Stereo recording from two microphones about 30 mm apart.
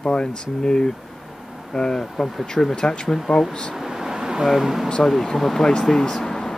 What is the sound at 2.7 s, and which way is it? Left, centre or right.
Speech, left.